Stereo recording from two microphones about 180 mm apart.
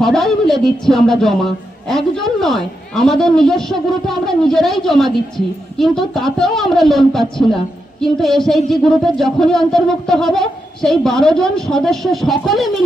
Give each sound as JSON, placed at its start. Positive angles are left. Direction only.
{"t": 0.0, "sound": "a woman's voice", "side_deg": 0}